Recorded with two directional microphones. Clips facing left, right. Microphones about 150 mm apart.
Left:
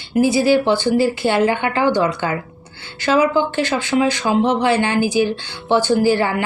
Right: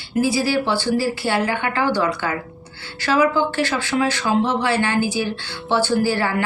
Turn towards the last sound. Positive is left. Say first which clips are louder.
# left 4 dB
turn(degrees=20)  # may be behind; listen again after turning